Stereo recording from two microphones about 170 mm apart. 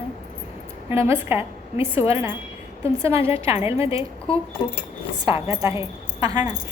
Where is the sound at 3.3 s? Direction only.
15° right (ahead or behind).